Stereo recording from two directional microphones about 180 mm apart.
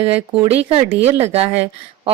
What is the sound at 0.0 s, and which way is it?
A woman's voice, 35° right (ahead or behind).